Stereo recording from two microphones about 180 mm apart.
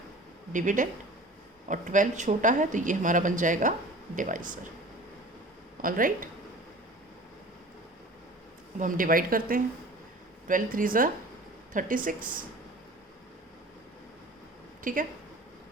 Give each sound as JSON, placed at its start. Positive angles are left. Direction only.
{"t": 0.5, "sound": "speech", "side_deg": -45}
{"t": 5.8, "sound": "speech", "side_deg": -50}
{"t": 8.8, "sound": "speech", "side_deg": -50}
{"t": 14.9, "sound": "speech", "side_deg": -50}